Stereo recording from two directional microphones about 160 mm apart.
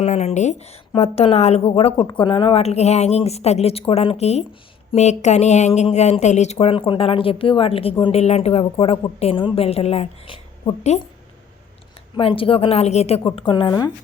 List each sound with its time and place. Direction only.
0.0 s a woman's voice: 45° left (ahead or behind)
12.1 s a woman's voice: 35° left (ahead or behind)